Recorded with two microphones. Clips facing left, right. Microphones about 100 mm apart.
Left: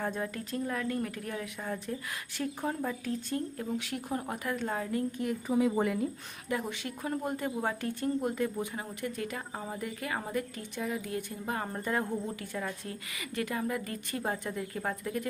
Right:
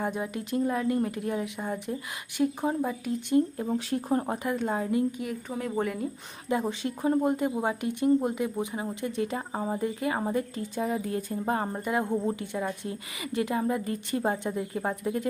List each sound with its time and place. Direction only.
0.0 s speech: 15° right (ahead or behind)
3.7 s a woman's voice: 35° right (ahead or behind)
4.4 s speech: 20° right (ahead or behind)
5.2 s speech: centre (ahead or behind)
6.5 s a woman's voice: 25° right (ahead or behind)
11.7 s speech: 15° right (ahead or behind)